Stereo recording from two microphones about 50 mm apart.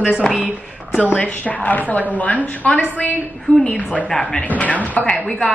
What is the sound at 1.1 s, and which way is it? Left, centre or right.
A woman's voice, left.